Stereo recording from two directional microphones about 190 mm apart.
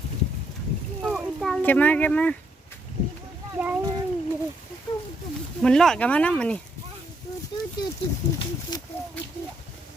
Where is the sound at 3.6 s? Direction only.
5° right (ahead or behind).